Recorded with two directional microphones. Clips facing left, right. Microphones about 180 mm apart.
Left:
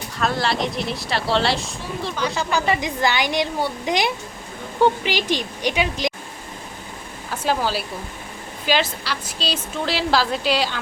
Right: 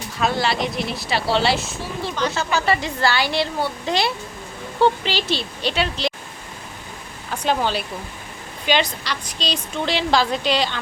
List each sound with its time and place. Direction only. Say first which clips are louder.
0.2 s a woman's voice: right 1 dB; centre (ahead or behind)
2.1 s a woman's voice: right 1 dB; 10° left (ahead or behind)
7.3 s a woman's voice: right 1 dB; 5° left (ahead or behind)